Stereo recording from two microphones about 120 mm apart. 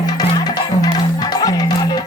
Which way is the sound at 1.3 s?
35° left (ahead or behind).